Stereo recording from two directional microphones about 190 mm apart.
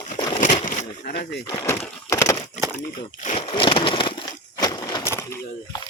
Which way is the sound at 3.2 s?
30° left (ahead or behind).